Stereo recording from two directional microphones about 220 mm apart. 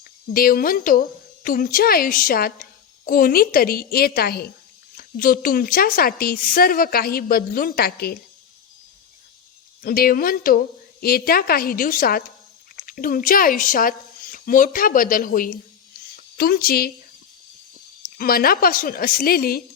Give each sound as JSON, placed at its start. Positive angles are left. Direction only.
{"t": 0.0, "sound": "a woman's voice", "side_deg": 40}
{"t": 9.8, "sound": "a woman's voice", "side_deg": 45}
{"t": 18.2, "sound": "a woman's voice", "side_deg": 40}